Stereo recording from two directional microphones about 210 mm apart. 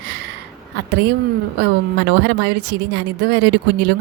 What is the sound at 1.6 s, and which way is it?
A woman's voice, 55° right (ahead or behind).